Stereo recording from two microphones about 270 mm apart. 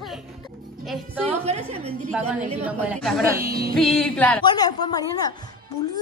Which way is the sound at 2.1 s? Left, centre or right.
Centre.